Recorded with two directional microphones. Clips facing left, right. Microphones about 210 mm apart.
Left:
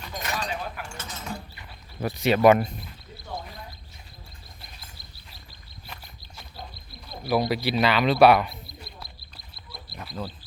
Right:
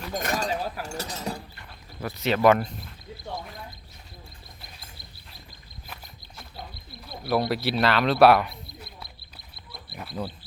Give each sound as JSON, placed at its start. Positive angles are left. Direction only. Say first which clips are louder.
{"t": 0.1, "sound": "chink", "louder": "right 4 dB", "side_deg": -50}
{"t": 2.0, "sound": "speech", "louder": "left 3 dB", "side_deg": 15}
{"t": 7.1, "sound": "speech", "louder": "left 1 dB", "side_deg": 0}
{"t": 9.9, "sound": "frog", "louder": "right 2 dB", "side_deg": 0}